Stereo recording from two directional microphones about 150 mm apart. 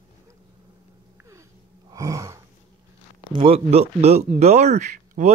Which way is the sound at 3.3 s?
35° right (ahead or behind).